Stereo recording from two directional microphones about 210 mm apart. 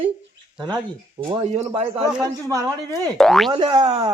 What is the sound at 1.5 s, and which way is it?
Speech, 30° right (ahead or behind).